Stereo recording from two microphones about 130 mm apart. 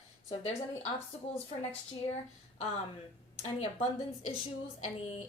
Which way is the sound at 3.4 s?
50° left (ahead or behind).